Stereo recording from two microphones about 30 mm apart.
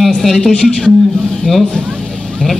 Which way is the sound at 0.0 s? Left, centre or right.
Centre.